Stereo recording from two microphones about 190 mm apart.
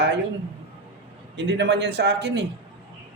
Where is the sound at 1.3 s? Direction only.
65° right (ahead or behind).